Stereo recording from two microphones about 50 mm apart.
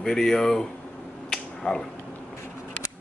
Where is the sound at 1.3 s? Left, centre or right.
Centre.